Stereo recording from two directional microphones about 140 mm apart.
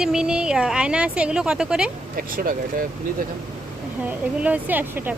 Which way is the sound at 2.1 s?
90° right.